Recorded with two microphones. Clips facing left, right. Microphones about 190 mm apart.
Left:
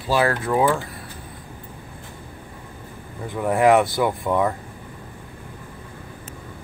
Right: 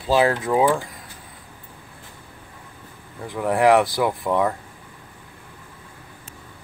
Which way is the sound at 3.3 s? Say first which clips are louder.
Even; centre (ahead or behind).